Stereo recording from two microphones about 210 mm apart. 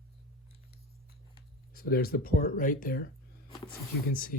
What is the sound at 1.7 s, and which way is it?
Speech, 45° left (ahead or behind).